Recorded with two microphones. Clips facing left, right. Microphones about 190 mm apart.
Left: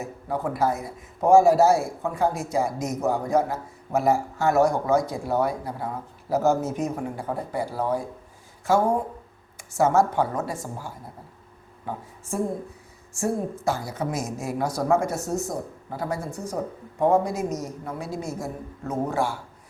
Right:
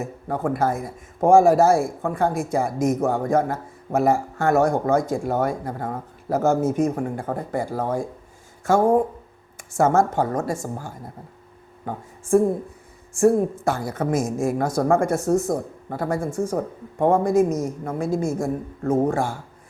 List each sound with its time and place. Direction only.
0.0 s a man's voice: 50° right (ahead or behind)